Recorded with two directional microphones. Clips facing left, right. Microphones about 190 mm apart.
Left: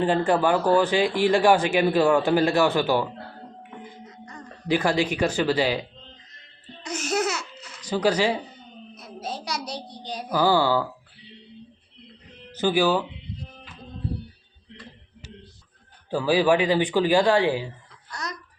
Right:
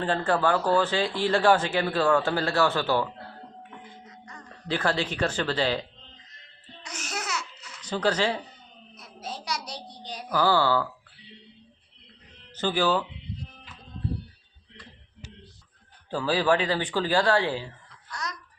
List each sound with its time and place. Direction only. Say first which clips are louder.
0.0 s a man's voice: left 4 dB; 15° left (ahead or behind)
4.7 s a man's voice: left 5 dB; 10° left (ahead or behind)
6.8 s babbling: left 11 dB; 25° left (ahead or behind)
7.8 s speech: left 3 dB; 10° left (ahead or behind)
9.0 s child singing: left 3 dB; 30° left (ahead or behind)
10.2 s a man's voice: left 2 dB; 15° left (ahead or behind)
12.5 s speech: left 4 dB; 10° left (ahead or behind)
16.0 s a man's voice: left 4 dB; 10° left (ahead or behind)